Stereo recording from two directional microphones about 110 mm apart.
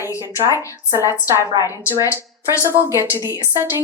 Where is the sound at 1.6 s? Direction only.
30° left (ahead or behind).